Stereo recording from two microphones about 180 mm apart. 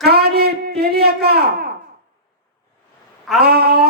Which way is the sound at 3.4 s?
60° right (ahead or behind).